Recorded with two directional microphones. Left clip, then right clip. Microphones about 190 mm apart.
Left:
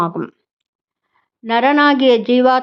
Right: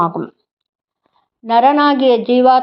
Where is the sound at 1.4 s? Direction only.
15° left (ahead or behind).